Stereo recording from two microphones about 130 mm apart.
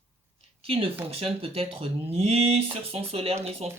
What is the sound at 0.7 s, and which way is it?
Speech, 45° right (ahead or behind).